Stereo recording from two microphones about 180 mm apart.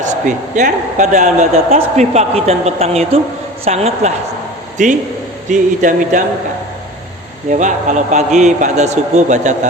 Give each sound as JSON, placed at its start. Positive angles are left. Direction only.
{"t": 0.0, "sound": "speech", "side_deg": -45}
{"t": 7.5, "sound": "speech", "side_deg": -45}